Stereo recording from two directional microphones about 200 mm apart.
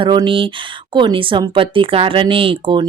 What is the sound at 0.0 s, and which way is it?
Speech, 25° right (ahead or behind).